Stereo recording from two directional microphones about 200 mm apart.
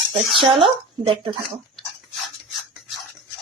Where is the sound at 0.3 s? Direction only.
25° right (ahead or behind).